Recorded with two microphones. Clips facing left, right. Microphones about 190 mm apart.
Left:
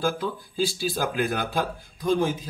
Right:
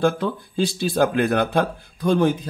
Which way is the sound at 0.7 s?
60° right (ahead or behind).